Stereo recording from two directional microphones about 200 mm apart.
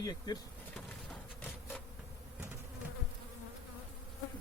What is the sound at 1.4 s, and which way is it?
Insect, 10° left (ahead or behind).